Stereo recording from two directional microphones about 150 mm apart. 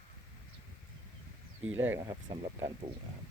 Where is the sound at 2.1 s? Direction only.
30° right (ahead or behind).